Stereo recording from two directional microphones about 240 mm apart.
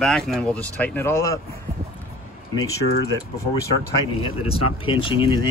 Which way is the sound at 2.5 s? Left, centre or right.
Centre.